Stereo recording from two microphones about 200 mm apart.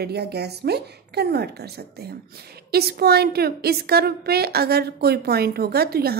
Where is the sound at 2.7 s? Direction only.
50° right (ahead or behind).